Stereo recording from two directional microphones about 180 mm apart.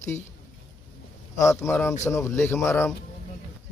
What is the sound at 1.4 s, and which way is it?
Speech, 15° left (ahead or behind).